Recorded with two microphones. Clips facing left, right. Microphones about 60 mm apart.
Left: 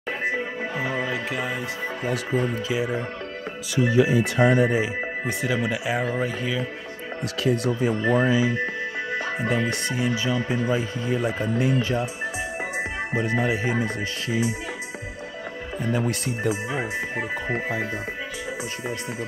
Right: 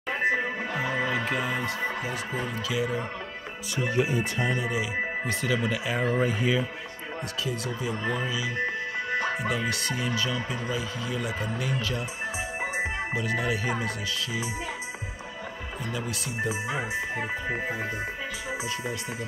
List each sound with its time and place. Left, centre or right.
1.3 s speech: centre
2.7 s speech: left
3.7 s speech: left
5.2 s speech: centre
6.2 s speech: centre
7.4 s speech: left
9.5 s speech: left
10.0 s speech: centre
10.7 s speech: left
13.1 s speech: left
15.9 s speech: left